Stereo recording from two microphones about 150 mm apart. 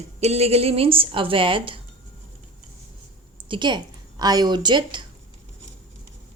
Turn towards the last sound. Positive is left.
turn(degrees=-30)  # may be behind; listen again after turning